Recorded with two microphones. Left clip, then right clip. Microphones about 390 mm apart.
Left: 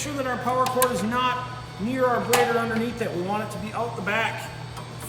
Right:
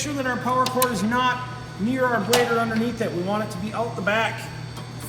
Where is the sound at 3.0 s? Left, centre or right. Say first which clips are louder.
Right 2 dB; centre.